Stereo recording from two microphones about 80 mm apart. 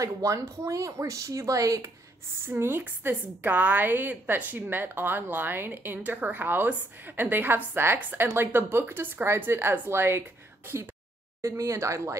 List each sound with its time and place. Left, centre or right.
0.0 s speech: right
2.4 s a woman's voice: right
11.4 s speech: right